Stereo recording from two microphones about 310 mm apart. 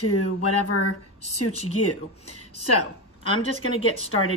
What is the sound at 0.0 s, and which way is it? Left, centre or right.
Speech, left.